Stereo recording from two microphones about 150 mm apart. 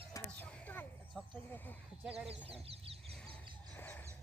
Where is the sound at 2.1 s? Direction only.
40° right (ahead or behind).